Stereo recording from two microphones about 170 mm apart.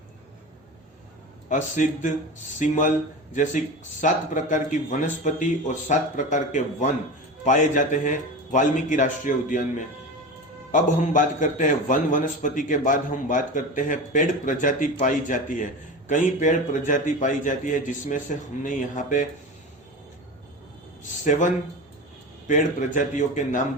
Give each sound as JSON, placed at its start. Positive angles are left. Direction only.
{"t": 1.5, "sound": "a man's voice", "side_deg": 50}
{"t": 4.0, "sound": "a man's voice", "side_deg": 50}
{"t": 21.2, "sound": "a man's voice", "side_deg": 45}
{"t": 23.0, "sound": "a man's voice", "side_deg": 50}